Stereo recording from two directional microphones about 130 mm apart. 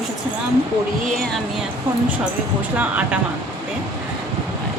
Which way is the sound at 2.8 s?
10° right (ahead or behind).